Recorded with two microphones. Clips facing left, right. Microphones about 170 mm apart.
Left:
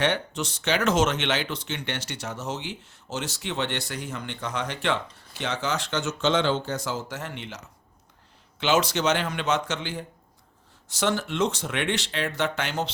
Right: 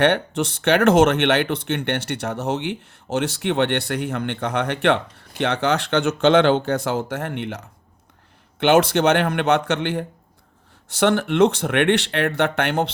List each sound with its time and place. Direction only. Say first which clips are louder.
0.0 s speech: right 7 dB; 60° right (ahead or behind)